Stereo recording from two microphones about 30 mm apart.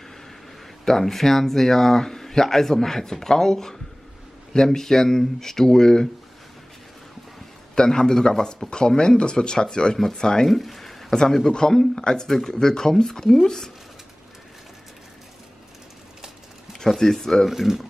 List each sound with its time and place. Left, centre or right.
0.8 s speech: centre
4.7 s speech: centre
7.7 s speech: left
10.4 s speech: centre
11.5 s speech: left
17.0 s speech: centre
17.5 s speech: centre